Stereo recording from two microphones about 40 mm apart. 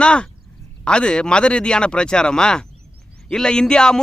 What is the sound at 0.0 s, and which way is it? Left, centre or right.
A man's voice, left.